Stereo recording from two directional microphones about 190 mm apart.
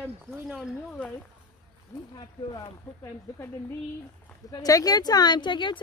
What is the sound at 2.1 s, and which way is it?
Speech, 20° left (ahead or behind).